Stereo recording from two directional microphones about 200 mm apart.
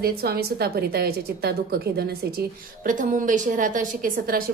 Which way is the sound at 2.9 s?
40° right (ahead or behind).